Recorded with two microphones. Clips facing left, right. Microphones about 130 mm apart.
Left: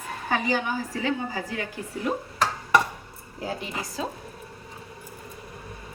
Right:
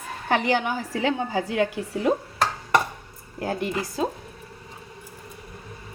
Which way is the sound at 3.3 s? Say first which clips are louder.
Right 5 dB; 60° right (ahead or behind).